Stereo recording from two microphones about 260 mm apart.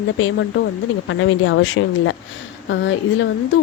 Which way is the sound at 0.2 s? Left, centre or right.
Left.